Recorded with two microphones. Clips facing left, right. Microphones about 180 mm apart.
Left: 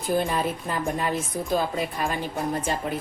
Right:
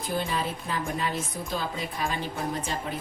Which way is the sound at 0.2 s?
50° left (ahead or behind).